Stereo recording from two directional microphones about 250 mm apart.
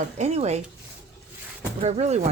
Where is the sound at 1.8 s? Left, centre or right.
Right.